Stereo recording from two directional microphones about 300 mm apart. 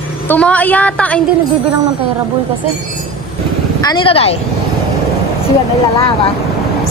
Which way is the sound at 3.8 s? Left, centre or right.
Centre.